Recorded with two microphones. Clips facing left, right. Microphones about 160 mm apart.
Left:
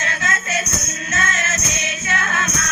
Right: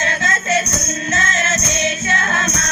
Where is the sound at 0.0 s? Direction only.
30° right (ahead or behind).